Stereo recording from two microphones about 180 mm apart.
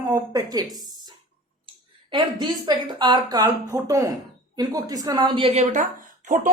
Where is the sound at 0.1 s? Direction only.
20° right (ahead or behind).